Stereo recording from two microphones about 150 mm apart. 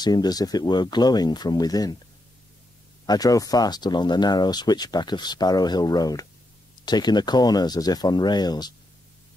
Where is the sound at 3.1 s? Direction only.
25° left (ahead or behind).